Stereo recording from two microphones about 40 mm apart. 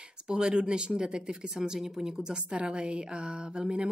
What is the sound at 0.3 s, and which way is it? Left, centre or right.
Speech, right.